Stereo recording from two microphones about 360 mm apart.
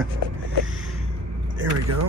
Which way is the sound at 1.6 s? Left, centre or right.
Right.